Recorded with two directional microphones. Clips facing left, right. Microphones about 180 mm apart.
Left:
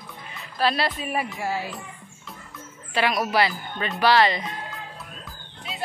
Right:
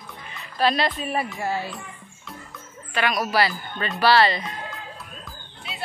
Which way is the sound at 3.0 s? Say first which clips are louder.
Even; 25° left (ahead or behind).